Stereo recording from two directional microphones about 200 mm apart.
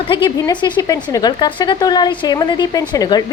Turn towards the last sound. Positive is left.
turn(degrees=20)  # may be behind; listen again after turning